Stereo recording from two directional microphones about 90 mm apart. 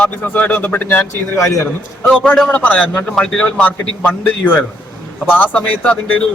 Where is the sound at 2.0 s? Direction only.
15° left (ahead or behind).